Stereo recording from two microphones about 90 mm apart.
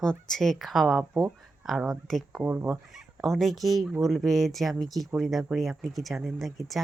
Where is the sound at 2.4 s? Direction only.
15° right (ahead or behind).